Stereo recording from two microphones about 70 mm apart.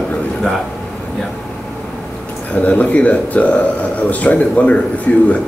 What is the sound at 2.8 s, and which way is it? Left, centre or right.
Speech, left.